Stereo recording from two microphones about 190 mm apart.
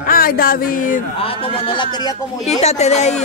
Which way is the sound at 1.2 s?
30° left (ahead or behind).